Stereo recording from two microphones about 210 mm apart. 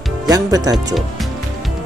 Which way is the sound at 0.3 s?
15° right (ahead or behind).